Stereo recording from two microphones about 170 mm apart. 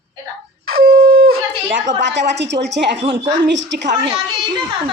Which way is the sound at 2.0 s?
90° right.